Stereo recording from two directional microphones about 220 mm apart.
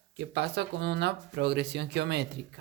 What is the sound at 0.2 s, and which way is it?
Speech, 50° right (ahead or behind).